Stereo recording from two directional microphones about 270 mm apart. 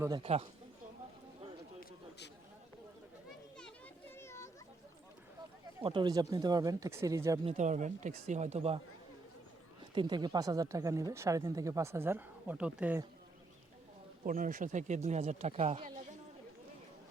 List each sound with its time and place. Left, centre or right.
0.0 s speech: centre
1.8 s a sound: left
4.1 s children playing: centre
5.8 s speech: centre
7.5 s speech: right
9.9 s speech: centre
14.3 s speech: right